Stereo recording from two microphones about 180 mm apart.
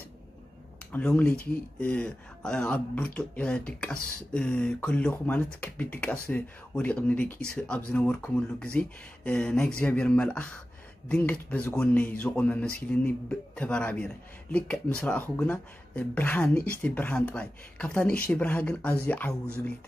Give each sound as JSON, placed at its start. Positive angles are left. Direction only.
{"t": 0.9, "sound": "speech", "side_deg": 10}